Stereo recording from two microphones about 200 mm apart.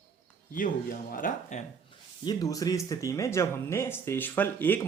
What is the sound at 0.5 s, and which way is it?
Speech, 40° left (ahead or behind).